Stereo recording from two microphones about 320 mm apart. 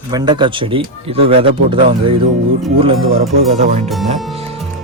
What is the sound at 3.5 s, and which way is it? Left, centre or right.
Speech, centre.